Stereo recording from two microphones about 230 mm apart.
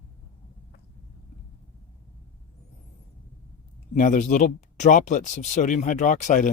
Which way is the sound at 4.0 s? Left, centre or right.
Left.